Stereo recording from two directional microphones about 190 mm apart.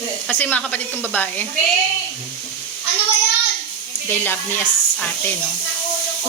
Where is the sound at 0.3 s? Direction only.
10° left (ahead or behind).